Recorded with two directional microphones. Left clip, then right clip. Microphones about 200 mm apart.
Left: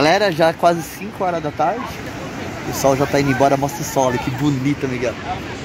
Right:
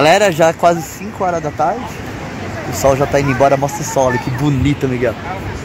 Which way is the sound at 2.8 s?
5° right (ahead or behind).